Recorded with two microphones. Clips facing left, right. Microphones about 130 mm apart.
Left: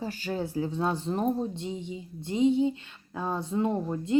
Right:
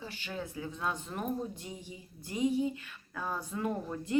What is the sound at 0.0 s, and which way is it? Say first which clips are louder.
Speech: left 9 dB; 40° left (ahead or behind).